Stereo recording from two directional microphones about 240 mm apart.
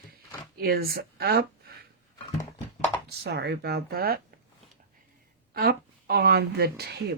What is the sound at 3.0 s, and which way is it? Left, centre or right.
Speech, right.